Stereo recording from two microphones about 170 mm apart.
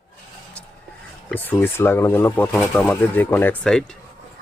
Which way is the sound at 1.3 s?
10° left (ahead or behind).